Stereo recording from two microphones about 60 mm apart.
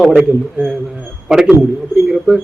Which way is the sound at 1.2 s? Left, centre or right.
Centre.